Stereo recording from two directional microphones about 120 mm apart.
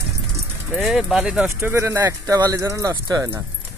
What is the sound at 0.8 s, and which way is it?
Speech, centre (ahead or behind).